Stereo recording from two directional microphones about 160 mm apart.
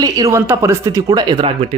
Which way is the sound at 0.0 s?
20° right (ahead or behind).